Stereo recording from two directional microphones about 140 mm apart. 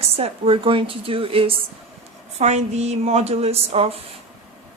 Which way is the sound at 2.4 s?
55° right (ahead or behind).